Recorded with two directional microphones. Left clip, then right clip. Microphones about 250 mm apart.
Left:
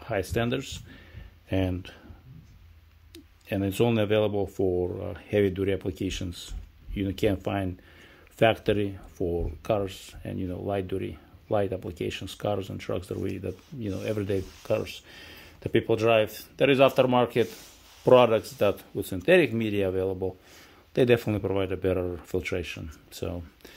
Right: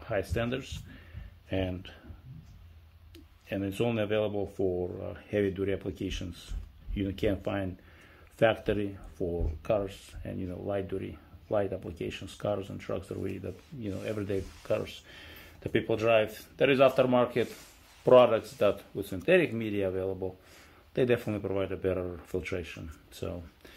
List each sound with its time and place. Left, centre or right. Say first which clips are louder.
0.0 s speech: left 3 dB; left
3.4 s speech: left 5 dB; left